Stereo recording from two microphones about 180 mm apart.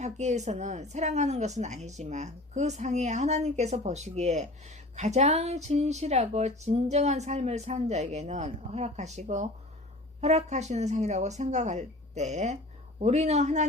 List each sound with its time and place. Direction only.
0.0 s speech: 40° right (ahead or behind)